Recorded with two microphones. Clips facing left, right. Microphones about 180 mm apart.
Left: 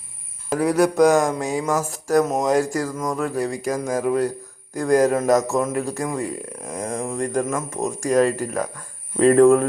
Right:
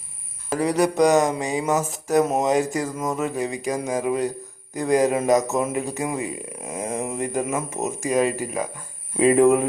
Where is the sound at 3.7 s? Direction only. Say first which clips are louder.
Left 1 dB; 15° right (ahead or behind).